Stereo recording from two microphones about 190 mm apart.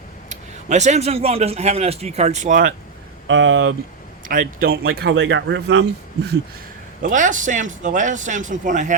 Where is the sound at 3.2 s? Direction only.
85° right.